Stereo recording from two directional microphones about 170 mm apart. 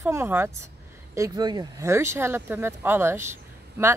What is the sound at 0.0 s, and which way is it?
Speech, 15° right (ahead or behind).